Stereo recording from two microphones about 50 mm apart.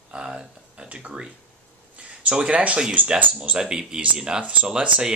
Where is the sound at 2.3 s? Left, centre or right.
Right.